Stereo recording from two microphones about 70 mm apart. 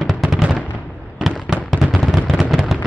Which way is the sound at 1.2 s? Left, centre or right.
Centre.